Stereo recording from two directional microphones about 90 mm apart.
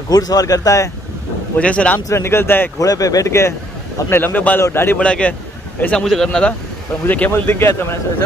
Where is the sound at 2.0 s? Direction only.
30° left (ahead or behind).